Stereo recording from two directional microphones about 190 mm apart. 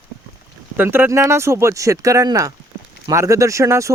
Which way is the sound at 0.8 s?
10° right (ahead or behind).